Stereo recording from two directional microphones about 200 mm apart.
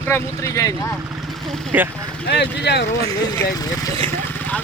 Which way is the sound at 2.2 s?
55° left (ahead or behind).